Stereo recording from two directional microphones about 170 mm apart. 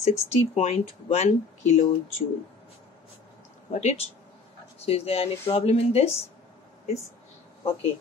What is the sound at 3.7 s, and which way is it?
Speech, 40° left (ahead or behind).